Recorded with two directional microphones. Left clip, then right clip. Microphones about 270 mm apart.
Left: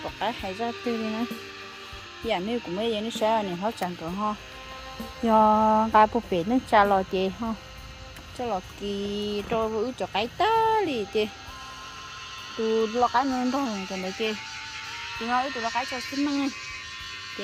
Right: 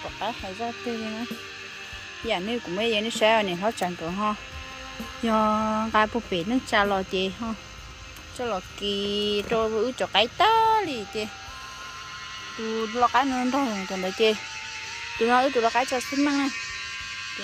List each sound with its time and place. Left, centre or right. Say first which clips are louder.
0.0 s speech: left 1 dB; centre
2.2 s speech: even; centre
8.5 s speech: right 2 dB; centre
12.6 s speech: left 1 dB; centre
13.5 s speech: right 2 dB; right
15.3 s speech: right 5 dB; right